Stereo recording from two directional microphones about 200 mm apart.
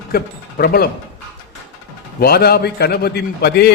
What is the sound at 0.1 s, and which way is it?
Speech, 50° left (ahead or behind).